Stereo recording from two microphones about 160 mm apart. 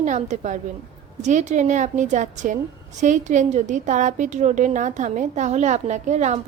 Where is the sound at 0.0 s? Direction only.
50° right (ahead or behind).